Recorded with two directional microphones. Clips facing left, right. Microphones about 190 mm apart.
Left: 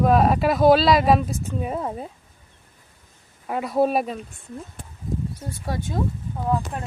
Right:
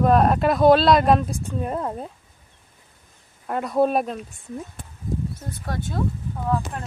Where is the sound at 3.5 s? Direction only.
5° left (ahead or behind).